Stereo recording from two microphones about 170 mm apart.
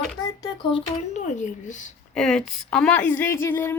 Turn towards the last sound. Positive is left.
turn(degrees=15)  # may be behind; listen again after turning